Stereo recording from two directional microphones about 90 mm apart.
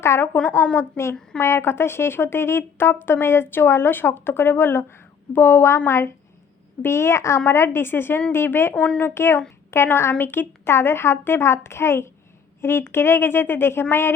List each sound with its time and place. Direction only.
0.0 s a woman's voice: 30° left (ahead or behind)
0.5 s speech: 20° left (ahead or behind)
8.7 s speech: 10° left (ahead or behind)